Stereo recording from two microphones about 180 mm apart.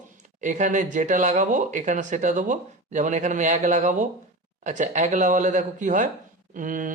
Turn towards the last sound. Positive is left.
turn(degrees=-45)  # may be behind; listen again after turning